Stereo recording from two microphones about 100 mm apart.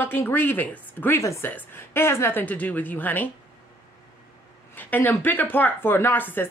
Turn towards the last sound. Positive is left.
turn(degrees=20)  # may be behind; listen again after turning